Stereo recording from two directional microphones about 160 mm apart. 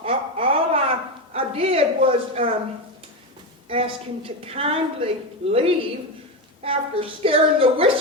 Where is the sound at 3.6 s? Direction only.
35° right (ahead or behind).